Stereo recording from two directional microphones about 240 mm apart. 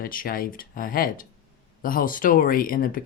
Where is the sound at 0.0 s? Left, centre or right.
Left.